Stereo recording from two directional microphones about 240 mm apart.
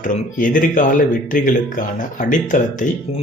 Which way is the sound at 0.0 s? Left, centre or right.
Left.